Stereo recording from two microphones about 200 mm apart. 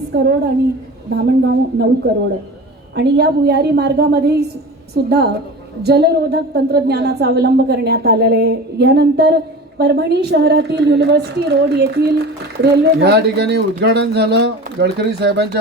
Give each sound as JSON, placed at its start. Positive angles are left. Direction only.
{"t": 0.1, "sound": "a woman's voice", "side_deg": -55}
{"t": 2.9, "sound": "a woman's voice", "side_deg": -55}